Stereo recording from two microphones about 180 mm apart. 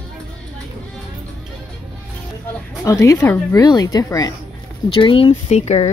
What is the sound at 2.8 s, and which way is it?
A woman's voice, 15° left (ahead or behind).